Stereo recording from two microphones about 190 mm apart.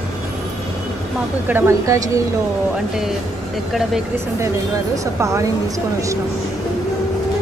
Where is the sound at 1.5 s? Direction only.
15° right (ahead or behind).